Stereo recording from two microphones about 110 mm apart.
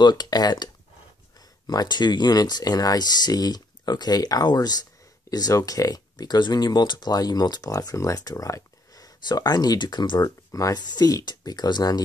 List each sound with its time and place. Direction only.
0.0 s speech: 40° left (ahead or behind)
1.7 s speech: 40° left (ahead or behind)